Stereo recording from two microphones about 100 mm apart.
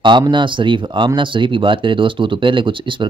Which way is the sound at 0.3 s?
55° right (ahead or behind).